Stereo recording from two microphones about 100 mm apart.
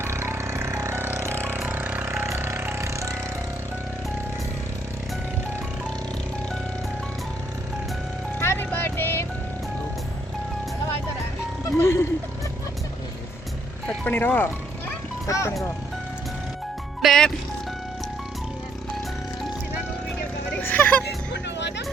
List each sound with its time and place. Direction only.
0.0 s vehicle: 25° right (ahead or behind)
8.4 s music: 25° left (ahead or behind)
11.8 s music: 25° left (ahead or behind)
13.8 s music: 20° left (ahead or behind)
15.3 s speech: 30° left (ahead or behind)
17.0 s music: 5° left (ahead or behind)
20.6 s music: 15° left (ahead or behind)